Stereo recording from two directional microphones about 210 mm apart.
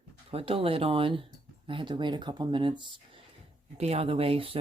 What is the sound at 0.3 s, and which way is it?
Speech, 25° right (ahead or behind).